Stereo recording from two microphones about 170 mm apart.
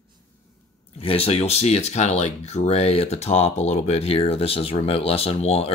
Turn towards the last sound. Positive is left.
turn(degrees=40)  # may be behind; listen again after turning